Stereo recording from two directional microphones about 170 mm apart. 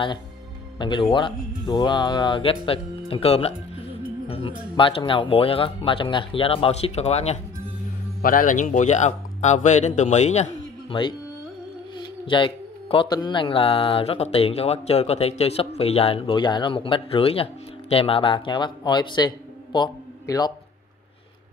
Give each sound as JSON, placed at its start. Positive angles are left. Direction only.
{"t": 0.7, "sound": "speech", "side_deg": 25}
{"t": 8.2, "sound": "speech", "side_deg": 55}
{"t": 12.3, "sound": "speech", "side_deg": 30}